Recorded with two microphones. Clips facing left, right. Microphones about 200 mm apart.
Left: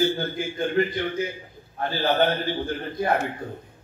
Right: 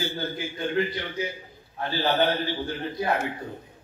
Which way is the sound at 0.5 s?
50° left (ahead or behind).